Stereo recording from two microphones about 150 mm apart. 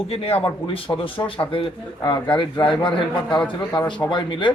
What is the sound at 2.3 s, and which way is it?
Speech, 35° left (ahead or behind).